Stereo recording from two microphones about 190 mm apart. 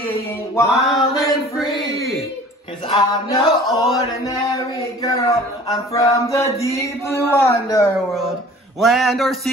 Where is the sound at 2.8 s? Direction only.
30° left (ahead or behind).